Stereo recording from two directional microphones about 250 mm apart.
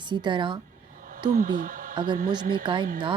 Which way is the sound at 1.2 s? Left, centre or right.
Right.